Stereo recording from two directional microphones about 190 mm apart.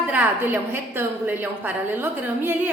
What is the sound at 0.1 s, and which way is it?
A woman's voice, 10° right (ahead or behind).